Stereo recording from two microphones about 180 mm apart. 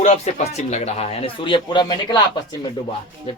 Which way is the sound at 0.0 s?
40° left (ahead or behind).